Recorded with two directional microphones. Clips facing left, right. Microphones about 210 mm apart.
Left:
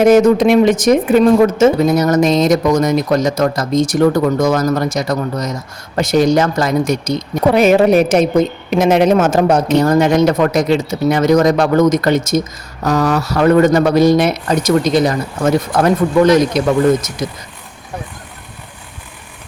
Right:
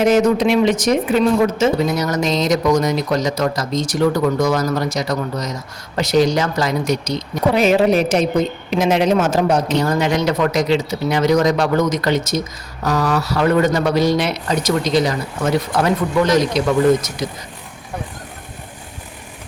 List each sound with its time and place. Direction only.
0.0 s speech: 50° left (ahead or behind)